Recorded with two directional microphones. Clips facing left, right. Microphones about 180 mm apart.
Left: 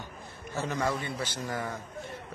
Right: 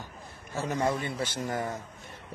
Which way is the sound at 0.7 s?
25° right (ahead or behind).